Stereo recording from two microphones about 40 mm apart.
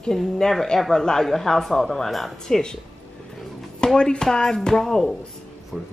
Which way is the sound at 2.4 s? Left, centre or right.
Centre.